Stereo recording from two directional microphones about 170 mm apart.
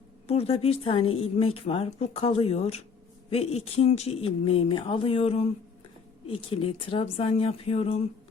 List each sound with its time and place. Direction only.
0.3 s a woman's voice: 35° left (ahead or behind)